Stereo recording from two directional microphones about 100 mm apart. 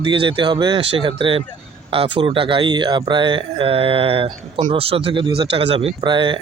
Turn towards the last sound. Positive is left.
turn(degrees=-55)  # may be behind; listen again after turning